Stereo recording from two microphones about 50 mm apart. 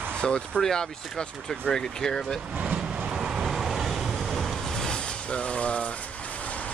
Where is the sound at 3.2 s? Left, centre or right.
Centre.